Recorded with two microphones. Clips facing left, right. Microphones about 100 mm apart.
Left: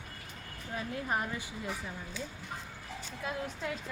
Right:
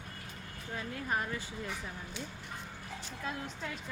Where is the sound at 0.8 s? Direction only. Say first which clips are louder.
Left 2 dB; 20° left (ahead or behind).